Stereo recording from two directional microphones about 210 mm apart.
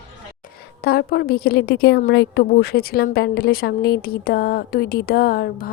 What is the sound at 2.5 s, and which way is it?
A woman's voice, 45° left (ahead or behind).